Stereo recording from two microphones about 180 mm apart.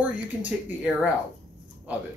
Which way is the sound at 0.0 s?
10° right (ahead or behind).